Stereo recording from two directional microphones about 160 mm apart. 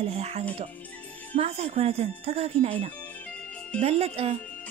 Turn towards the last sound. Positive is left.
turn(degrees=-40)  # may be behind; listen again after turning